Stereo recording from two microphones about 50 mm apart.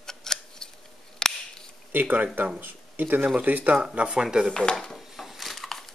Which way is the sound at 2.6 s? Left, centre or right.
Right.